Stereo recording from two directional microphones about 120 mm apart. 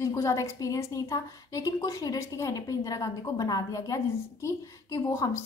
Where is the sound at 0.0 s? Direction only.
25° left (ahead or behind).